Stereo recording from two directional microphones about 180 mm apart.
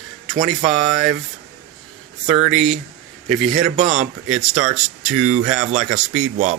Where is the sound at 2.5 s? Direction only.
5° right (ahead or behind).